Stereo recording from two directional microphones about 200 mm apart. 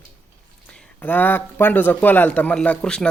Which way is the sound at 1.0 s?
10° left (ahead or behind).